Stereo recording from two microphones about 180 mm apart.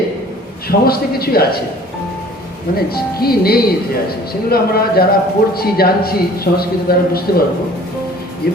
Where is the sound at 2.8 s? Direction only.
60° left (ahead or behind).